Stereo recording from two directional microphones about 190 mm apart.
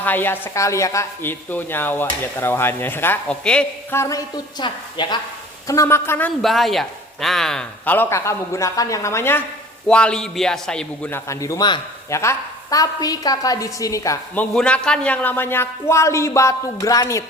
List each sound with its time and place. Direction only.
0.0 s a woman's voice: 10° left (ahead or behind)
14.5 s a woman's voice: 5° left (ahead or behind)